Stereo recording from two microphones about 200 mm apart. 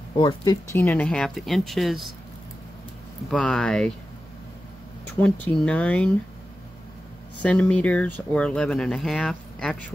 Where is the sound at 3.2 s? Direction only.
Centre (ahead or behind).